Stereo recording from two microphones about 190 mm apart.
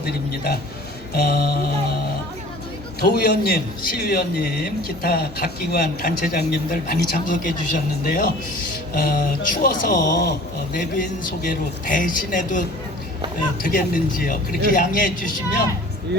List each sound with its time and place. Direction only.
0.0 s a man's voice: 55° left (ahead or behind)
3.0 s a man's voice: 50° left (ahead or behind)